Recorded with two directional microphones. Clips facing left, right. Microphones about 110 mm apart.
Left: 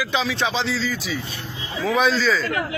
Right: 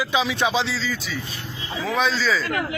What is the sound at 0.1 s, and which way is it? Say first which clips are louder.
Speech: right 3 dB; 10° right (ahead or behind).